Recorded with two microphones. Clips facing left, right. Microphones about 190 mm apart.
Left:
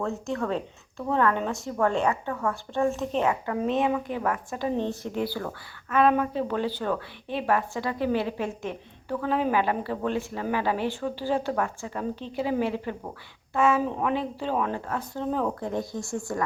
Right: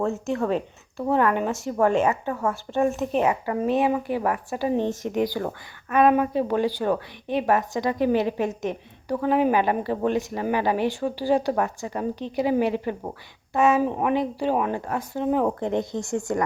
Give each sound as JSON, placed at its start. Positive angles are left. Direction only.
{"t": 0.0, "sound": "speech", "side_deg": -15}